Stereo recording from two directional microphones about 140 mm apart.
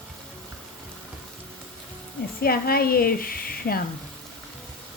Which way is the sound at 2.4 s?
90° left.